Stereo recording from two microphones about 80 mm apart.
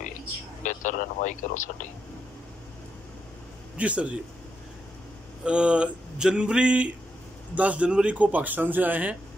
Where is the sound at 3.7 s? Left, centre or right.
Centre.